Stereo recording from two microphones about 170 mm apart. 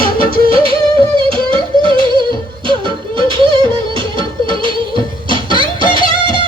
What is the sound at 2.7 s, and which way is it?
Music, 30° right (ahead or behind).